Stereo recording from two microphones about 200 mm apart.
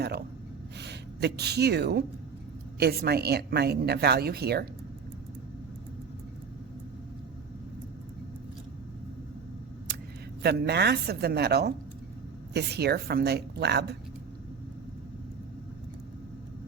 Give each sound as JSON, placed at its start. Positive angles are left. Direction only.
{"t": 0.8, "sound": "a woman's voice", "side_deg": -55}
{"t": 10.4, "sound": "a woman's voice", "side_deg": -55}